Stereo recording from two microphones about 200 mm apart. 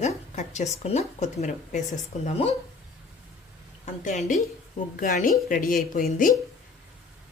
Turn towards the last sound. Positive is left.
turn(degrees=45)  # may be behind; listen again after turning